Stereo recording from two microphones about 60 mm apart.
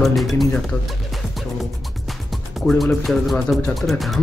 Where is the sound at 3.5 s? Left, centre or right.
Centre.